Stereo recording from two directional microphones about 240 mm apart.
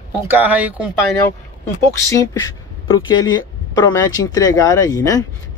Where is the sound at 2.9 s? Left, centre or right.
Centre.